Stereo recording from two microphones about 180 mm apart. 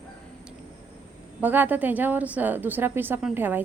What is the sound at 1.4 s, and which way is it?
A woman's voice, 10° right (ahead or behind).